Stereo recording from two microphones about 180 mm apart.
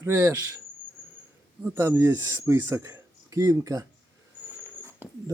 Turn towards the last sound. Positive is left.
turn(degrees=-10)  # may be behind; listen again after turning